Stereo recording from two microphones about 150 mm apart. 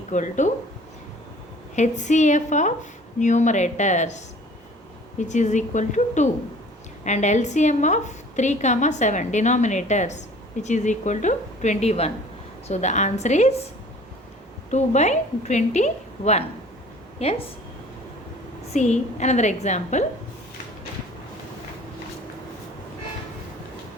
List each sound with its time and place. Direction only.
0.1 s speech: 55° left (ahead or behind)
1.7 s a woman's voice: 50° left (ahead or behind)
5.3 s a woman's voice: 55° left (ahead or behind)
14.7 s a woman's voice: 50° left (ahead or behind)
18.7 s a woman's voice: 50° left (ahead or behind)